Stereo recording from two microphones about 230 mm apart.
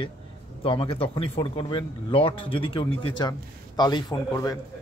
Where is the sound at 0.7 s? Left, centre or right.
Left.